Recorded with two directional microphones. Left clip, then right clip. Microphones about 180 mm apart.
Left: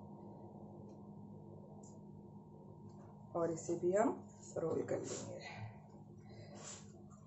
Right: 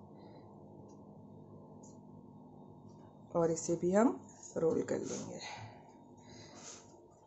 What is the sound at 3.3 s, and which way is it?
Speech, 60° right (ahead or behind).